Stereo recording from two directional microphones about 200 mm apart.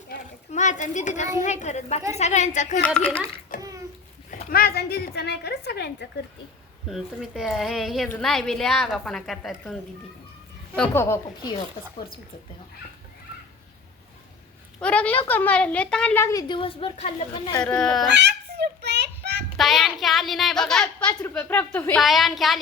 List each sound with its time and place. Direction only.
0.5 s a woman's voice: 35° left (ahead or behind)
2.8 s a woman's voice: 5° left (ahead or behind)
3.5 s a sound: 40° left (ahead or behind)
4.3 s a woman's voice: 40° left (ahead or behind)
6.8 s a woman's voice: centre (ahead or behind)
10.8 s a woman's voice: 15° left (ahead or behind)
14.8 s a woman's voice: 5° left (ahead or behind)
17.6 s a woman's voice: 5° left (ahead or behind)
18.1 s child singing: 60° right (ahead or behind)
19.5 s a woman's voice: centre (ahead or behind)